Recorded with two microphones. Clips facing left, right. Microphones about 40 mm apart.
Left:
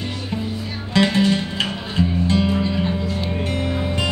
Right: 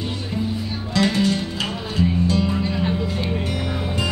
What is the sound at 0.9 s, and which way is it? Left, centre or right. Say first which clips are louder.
Music: left 2 dB; left.